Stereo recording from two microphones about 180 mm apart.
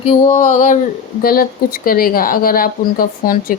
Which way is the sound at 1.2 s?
55° left (ahead or behind).